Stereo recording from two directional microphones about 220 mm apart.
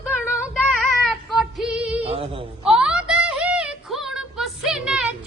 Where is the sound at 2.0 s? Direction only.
25° right (ahead or behind).